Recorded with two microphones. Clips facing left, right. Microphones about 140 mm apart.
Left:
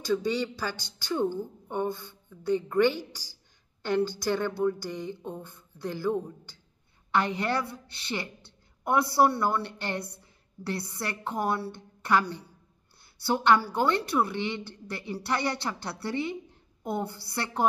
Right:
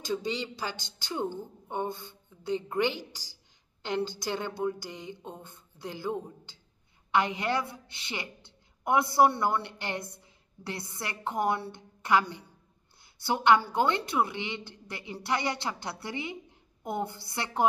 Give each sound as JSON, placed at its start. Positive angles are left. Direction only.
{"t": 0.0, "sound": "a woman's voice", "side_deg": -20}